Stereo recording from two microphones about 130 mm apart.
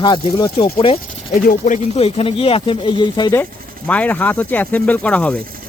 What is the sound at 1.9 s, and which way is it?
Speech, 50° left (ahead or behind).